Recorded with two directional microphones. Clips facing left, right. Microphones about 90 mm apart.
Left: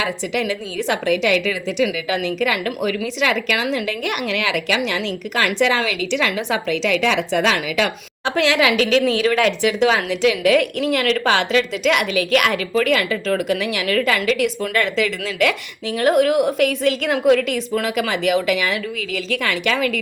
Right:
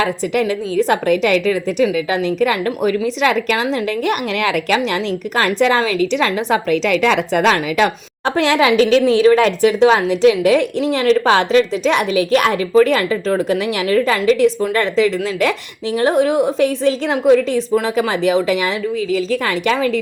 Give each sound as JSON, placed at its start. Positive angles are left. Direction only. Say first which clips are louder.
{"t": 0.0, "sound": "a woman's voice", "louder": "right 5 dB", "side_deg": -40}